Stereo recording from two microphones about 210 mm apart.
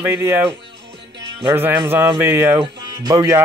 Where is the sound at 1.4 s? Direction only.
10° right (ahead or behind).